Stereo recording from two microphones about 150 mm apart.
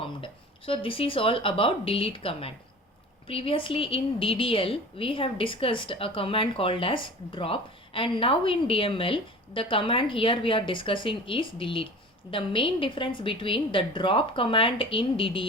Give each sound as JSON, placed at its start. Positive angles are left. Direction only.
{"t": 0.0, "sound": "a woman's voice", "side_deg": 35}